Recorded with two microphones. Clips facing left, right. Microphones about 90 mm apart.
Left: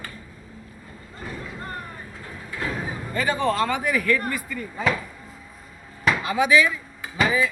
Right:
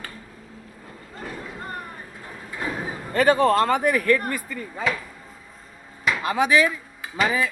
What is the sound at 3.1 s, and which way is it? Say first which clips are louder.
A man's voice: right 6 dB; 60° right (ahead or behind).